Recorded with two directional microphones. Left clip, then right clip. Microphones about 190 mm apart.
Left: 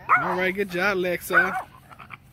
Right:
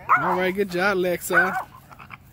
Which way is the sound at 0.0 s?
30° left (ahead or behind).